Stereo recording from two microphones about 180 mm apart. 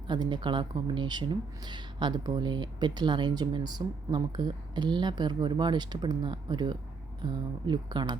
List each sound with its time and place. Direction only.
0.1 s speech: 25° right (ahead or behind)